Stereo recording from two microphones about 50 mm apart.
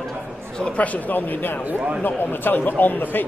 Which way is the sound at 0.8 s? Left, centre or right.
Left.